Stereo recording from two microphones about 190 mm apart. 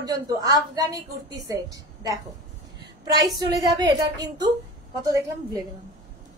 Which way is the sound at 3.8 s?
20° right (ahead or behind).